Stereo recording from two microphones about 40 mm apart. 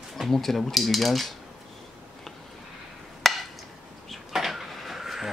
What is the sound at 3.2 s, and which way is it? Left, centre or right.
Chop, centre.